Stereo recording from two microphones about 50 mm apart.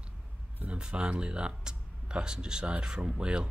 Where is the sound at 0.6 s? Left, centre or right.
Right.